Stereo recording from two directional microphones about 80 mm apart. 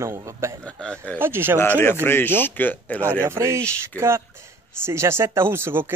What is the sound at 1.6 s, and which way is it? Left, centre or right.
Speech, left.